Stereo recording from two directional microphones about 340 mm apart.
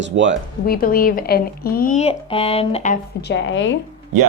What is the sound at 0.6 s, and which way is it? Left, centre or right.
Speech, left.